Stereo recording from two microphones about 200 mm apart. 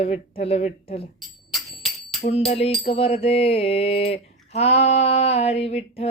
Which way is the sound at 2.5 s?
30° left (ahead or behind).